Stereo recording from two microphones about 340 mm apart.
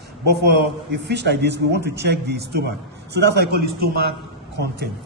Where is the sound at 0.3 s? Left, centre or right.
Right.